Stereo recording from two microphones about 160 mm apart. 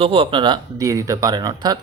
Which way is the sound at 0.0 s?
35° right (ahead or behind).